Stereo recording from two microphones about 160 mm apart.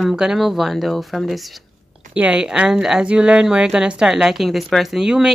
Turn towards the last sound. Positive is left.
turn(degrees=-5)  # may be behind; listen again after turning